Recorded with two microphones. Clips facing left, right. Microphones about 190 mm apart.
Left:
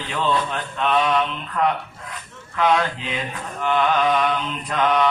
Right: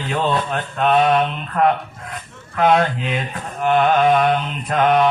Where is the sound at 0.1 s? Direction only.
45° right (ahead or behind).